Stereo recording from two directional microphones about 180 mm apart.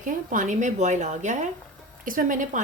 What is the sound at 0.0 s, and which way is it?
A woman's voice, 45° right (ahead or behind).